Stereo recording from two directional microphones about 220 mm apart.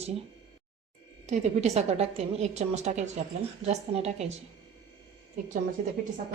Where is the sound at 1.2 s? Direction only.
30° right (ahead or behind).